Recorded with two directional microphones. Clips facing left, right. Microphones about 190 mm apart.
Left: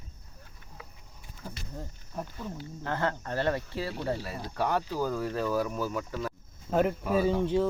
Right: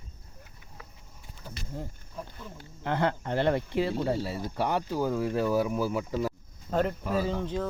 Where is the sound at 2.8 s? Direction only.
15° right (ahead or behind).